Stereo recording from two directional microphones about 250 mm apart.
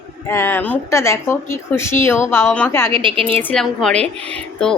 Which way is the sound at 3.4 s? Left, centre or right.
Centre.